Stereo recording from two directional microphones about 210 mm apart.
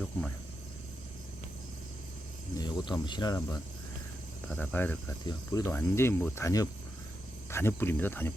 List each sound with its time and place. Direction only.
2.6 s speech: 20° left (ahead or behind)